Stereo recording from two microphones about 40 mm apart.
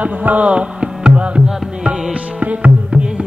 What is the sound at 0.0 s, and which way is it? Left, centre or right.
Music, right.